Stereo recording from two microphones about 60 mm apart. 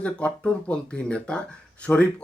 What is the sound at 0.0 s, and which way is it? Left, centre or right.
Speech, left.